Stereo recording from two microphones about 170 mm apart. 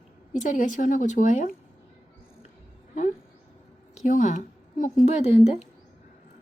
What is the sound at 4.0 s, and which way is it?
A woman's voice, 45° left (ahead or behind).